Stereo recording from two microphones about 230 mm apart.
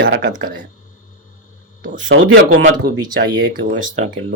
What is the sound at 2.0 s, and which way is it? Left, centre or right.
Speech, right.